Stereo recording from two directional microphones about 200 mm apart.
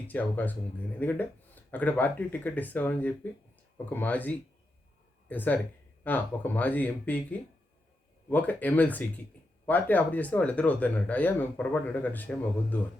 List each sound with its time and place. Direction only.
0.1 s speech: 10° left (ahead or behind)